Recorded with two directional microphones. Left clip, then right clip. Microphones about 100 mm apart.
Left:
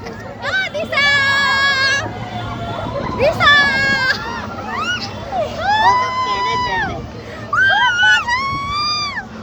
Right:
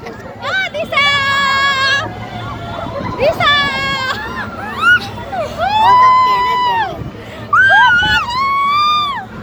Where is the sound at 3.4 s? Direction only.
10° left (ahead or behind).